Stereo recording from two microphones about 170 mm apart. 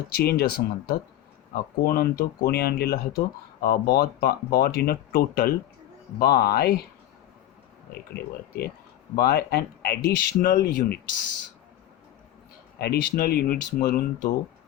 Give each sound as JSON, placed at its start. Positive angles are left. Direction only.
{"t": 0.1, "sound": "speech", "side_deg": 65}
{"t": 8.1, "sound": "speech", "side_deg": 65}
{"t": 12.8, "sound": "speech", "side_deg": 65}